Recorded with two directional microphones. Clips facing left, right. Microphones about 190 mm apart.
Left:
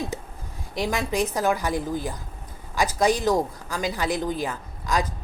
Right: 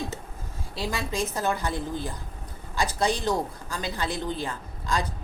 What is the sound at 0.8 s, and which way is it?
A woman's voice, 15° left (ahead or behind).